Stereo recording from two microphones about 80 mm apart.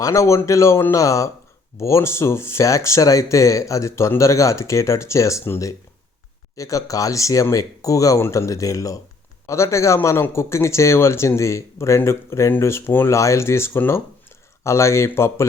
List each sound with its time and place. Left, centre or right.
0.0 s speech: left